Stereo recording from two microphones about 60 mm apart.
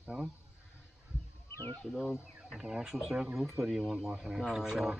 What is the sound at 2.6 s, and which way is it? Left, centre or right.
Speech, centre.